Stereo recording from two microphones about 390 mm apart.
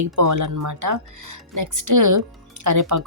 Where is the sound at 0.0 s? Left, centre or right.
Right.